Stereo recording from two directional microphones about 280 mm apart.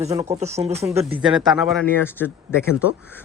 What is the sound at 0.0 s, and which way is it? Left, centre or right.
Speech, right.